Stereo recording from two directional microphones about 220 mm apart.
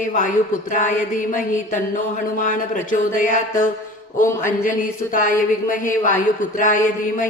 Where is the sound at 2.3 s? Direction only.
35° left (ahead or behind).